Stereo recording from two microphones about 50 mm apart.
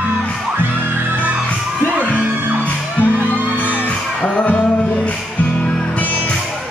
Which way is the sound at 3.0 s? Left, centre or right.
Left.